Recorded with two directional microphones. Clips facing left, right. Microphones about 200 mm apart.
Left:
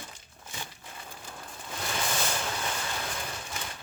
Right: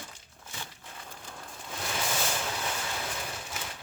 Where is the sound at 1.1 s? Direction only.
5° left (ahead or behind).